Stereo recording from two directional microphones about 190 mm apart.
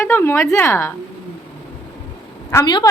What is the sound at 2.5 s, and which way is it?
Speech, 20° left (ahead or behind).